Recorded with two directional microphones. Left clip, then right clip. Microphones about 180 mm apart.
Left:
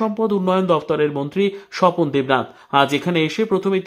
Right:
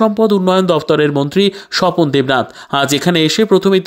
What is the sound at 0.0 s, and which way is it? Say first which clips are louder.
Speech: right 8 dB; 35° right (ahead or behind).